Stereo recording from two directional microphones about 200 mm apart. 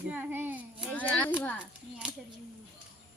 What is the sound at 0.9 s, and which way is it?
Speech, 5° left (ahead or behind).